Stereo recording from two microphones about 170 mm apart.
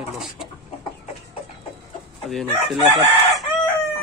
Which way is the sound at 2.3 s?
Centre (ahead or behind).